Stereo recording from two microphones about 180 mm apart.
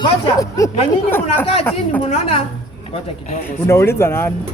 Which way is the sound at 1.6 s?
10° left (ahead or behind).